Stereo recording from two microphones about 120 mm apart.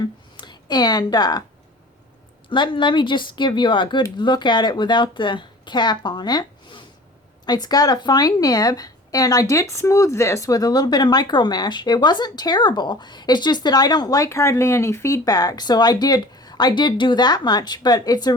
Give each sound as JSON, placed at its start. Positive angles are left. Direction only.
{"t": 0.0, "sound": "speech", "side_deg": 35}
{"t": 2.5, "sound": "a woman's voice", "side_deg": 45}